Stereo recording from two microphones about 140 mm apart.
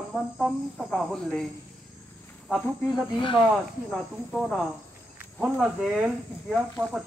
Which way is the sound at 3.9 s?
Centre (ahead or behind).